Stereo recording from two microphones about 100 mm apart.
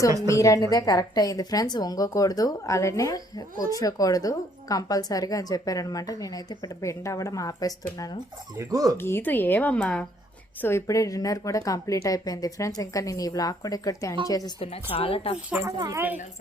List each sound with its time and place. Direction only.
0.3 s a woman's voice: 30° left (ahead or behind)
8.5 s speech: 35° right (ahead or behind)
9.0 s speech: 25° left (ahead or behind)
10.6 s a woman's voice: 25° left (ahead or behind)
14.6 s speech: 70° left (ahead or behind)
16.0 s a woman's voice: 15° right (ahead or behind)